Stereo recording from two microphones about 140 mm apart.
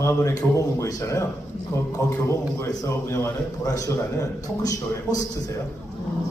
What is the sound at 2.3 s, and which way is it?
A man's voice, 20° left (ahead or behind).